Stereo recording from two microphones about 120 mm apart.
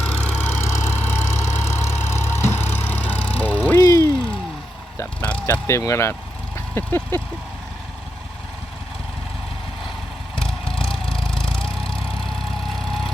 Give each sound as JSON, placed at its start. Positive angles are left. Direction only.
{"t": 0.3, "sound": "vehicle", "side_deg": 20}
{"t": 3.8, "sound": "vehicle", "side_deg": 30}
{"t": 5.2, "sound": "vehicle", "side_deg": 10}
{"t": 5.6, "sound": "speech", "side_deg": 25}
{"t": 6.7, "sound": "vehicle", "side_deg": 15}
{"t": 10.3, "sound": "vehicle", "side_deg": 5}
{"t": 11.6, "sound": "vehicle", "side_deg": 50}
{"t": 12.2, "sound": "vehicle", "side_deg": 0}